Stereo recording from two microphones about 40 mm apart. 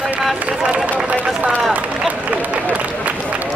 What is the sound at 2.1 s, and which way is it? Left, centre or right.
Speech, right.